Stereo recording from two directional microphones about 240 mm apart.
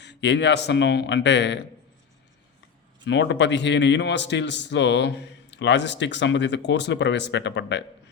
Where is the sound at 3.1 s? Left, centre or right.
Left.